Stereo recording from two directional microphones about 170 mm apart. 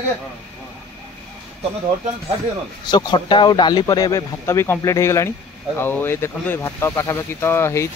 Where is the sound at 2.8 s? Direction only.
25° left (ahead or behind).